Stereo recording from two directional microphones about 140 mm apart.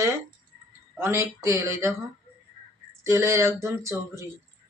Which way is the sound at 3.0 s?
20° right (ahead or behind).